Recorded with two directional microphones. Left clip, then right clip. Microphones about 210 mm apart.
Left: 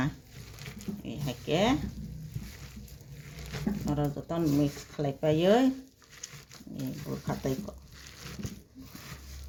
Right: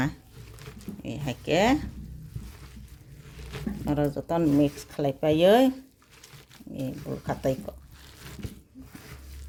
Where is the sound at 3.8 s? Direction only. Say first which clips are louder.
Right 7 dB; 55° right (ahead or behind).